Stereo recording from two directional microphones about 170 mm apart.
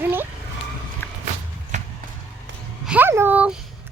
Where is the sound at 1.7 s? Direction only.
45° right (ahead or behind).